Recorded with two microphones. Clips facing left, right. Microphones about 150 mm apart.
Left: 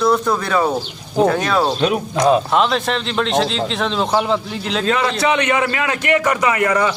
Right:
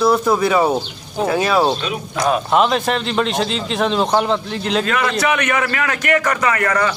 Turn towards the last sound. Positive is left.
turn(degrees=15)  # may be behind; listen again after turning